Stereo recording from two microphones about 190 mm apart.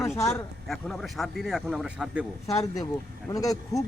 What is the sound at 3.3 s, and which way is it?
Speech, 20° left (ahead or behind).